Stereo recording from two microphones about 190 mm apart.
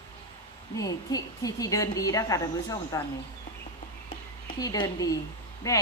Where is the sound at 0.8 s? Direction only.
20° left (ahead or behind).